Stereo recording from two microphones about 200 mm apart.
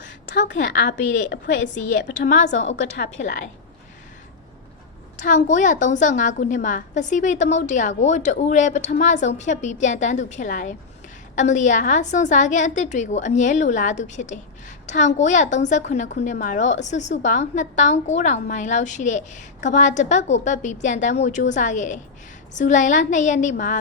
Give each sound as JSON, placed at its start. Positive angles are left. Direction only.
{"t": 0.4, "sound": "a woman's voice", "side_deg": 60}
{"t": 1.3, "sound": "a woman's voice", "side_deg": 40}
{"t": 5.1, "sound": "a woman's voice", "side_deg": 40}